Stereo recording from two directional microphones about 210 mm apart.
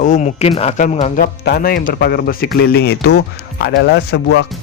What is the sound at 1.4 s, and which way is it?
Speech, 45° left (ahead or behind).